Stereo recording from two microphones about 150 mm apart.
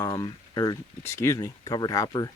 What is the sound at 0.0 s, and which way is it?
Speech, 25° left (ahead or behind).